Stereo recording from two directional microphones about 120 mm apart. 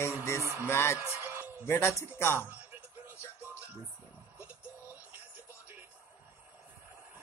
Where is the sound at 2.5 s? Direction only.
15° right (ahead or behind).